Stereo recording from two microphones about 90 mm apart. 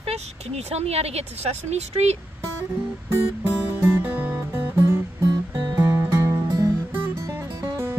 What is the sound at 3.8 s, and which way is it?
Music, 20° right (ahead or behind).